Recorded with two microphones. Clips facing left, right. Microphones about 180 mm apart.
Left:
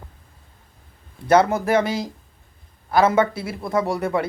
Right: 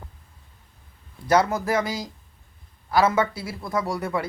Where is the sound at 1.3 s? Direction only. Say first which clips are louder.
Left 4 dB; 25° left (ahead or behind).